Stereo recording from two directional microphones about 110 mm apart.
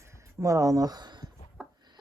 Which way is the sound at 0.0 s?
25° right (ahead or behind).